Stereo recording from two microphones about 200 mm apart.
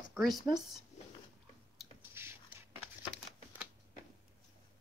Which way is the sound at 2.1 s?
10° right (ahead or behind).